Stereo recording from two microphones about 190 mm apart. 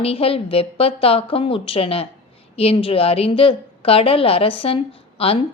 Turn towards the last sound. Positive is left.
turn(degrees=30)  # may be behind; listen again after turning